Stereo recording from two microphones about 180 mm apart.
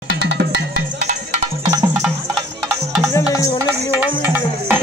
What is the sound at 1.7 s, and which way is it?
Music, 20° right (ahead or behind).